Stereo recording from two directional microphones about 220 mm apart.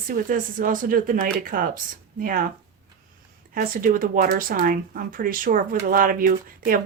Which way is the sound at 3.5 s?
40° right (ahead or behind).